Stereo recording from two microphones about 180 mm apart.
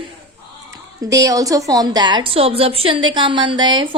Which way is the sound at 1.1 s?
20° right (ahead or behind).